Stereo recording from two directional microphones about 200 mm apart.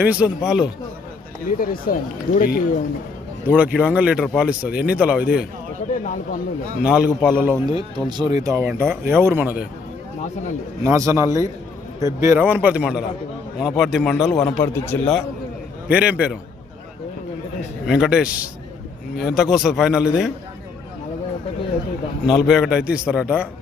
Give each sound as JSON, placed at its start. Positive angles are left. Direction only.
{"t": 0.0, "sound": "a man's voice", "side_deg": -5}
{"t": 1.5, "sound": "speech", "side_deg": 45}
{"t": 3.4, "sound": "a man's voice", "side_deg": -5}
{"t": 6.8, "sound": "a man's voice", "side_deg": -5}
{"t": 7.7, "sound": "speech", "side_deg": -20}
{"t": 10.8, "sound": "a man's voice", "side_deg": -15}
{"t": 15.9, "sound": "speech", "side_deg": -5}
{"t": 17.8, "sound": "a man's voice", "side_deg": -5}
{"t": 22.3, "sound": "a man's voice", "side_deg": -5}